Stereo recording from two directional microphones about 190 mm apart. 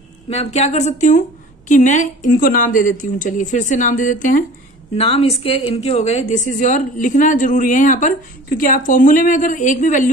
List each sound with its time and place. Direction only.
0.3 s a woman's voice: 35° left (ahead or behind)
4.9 s a woman's voice: 30° left (ahead or behind)